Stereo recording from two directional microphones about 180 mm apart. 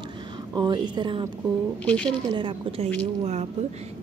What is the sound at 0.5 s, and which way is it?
Speech, 25° right (ahead or behind).